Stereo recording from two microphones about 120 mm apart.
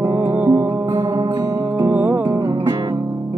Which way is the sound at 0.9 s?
30° right (ahead or behind).